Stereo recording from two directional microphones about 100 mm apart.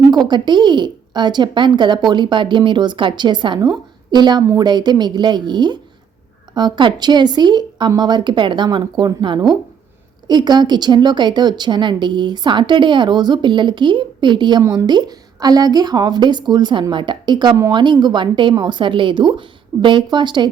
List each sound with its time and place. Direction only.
0.1 s a woman's voice: 45° right (ahead or behind)
14.6 s speech: 30° right (ahead or behind)
14.8 s a woman's voice: 45° right (ahead or behind)